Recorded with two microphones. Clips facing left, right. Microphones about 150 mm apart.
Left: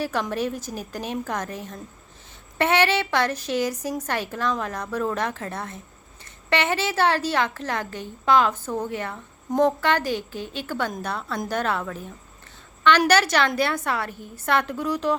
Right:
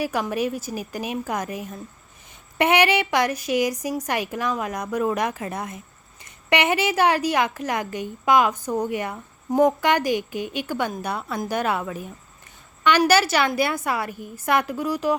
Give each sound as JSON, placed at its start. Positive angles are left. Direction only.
{"t": 0.0, "sound": "a woman's voice", "side_deg": -10}